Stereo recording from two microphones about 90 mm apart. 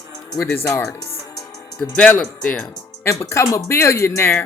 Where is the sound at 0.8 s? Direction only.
35° left (ahead or behind).